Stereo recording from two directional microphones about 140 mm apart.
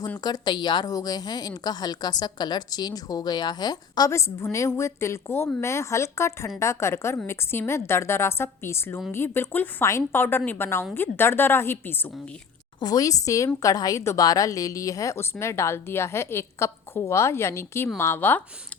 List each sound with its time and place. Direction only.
0.2 s a woman's voice: 30° left (ahead or behind)
12.8 s a woman's voice: 25° left (ahead or behind)